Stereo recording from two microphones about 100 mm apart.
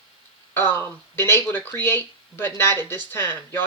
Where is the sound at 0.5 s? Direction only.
20° left (ahead or behind).